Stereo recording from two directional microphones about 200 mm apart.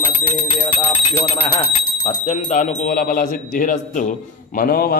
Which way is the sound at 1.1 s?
15° left (ahead or behind).